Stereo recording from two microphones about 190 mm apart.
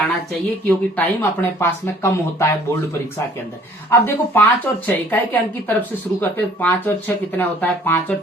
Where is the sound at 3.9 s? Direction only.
10° left (ahead or behind).